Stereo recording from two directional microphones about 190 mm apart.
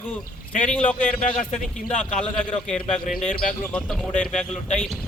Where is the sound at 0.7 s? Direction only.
5° left (ahead or behind).